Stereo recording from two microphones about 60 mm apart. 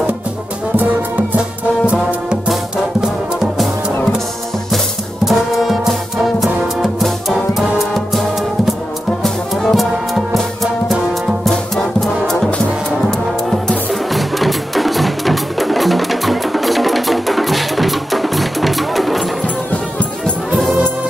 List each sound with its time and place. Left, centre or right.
0.7 s music: right
2.4 s music: centre
5.2 s music: centre
11.7 s music: centre
13.5 s music: centre
19.7 s music: left